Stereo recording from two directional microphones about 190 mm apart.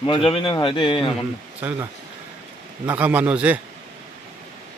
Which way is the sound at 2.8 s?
10° right (ahead or behind).